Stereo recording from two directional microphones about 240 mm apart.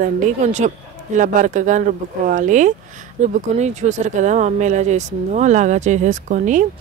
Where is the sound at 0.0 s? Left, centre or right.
Right.